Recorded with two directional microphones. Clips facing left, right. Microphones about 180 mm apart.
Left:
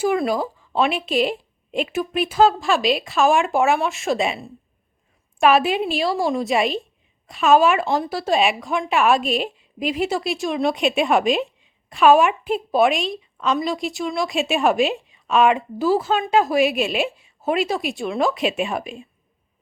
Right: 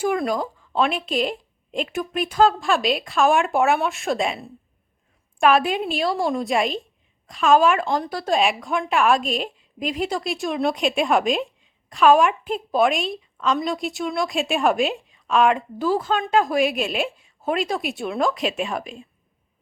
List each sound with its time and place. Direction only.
0.0 s a woman's voice: 5° left (ahead or behind)